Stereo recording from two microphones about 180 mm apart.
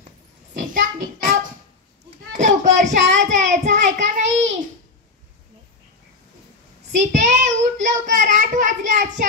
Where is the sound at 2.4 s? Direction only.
40° right (ahead or behind).